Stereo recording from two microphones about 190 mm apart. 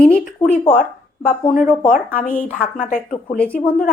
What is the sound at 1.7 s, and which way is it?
A woman's voice, 45° left (ahead or behind).